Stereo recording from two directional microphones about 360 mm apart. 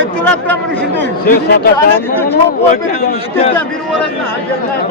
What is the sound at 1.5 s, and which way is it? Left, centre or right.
Speech, left.